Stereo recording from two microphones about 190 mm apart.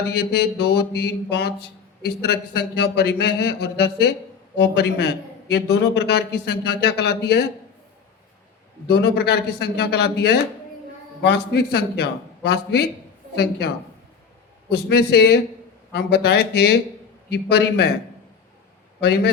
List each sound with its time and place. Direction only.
0.1 s speech: 60° left (ahead or behind)
8.9 s speech: 60° left (ahead or behind)
18.9 s speech: 60° left (ahead or behind)